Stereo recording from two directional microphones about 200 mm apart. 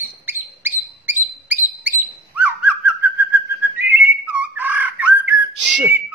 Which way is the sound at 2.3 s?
10° right (ahead or behind).